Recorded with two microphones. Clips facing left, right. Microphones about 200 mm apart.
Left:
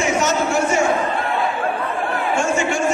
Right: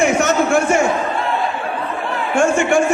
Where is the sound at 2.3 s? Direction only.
55° right (ahead or behind).